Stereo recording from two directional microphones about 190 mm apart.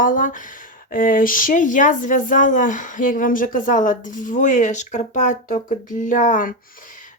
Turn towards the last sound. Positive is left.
turn(degrees=40)  # may be behind; listen again after turning